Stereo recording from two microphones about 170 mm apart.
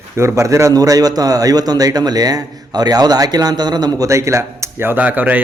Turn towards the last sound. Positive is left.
turn(degrees=-10)  # may be behind; listen again after turning